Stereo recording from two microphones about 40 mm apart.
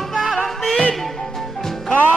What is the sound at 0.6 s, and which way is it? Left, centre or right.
Music, centre.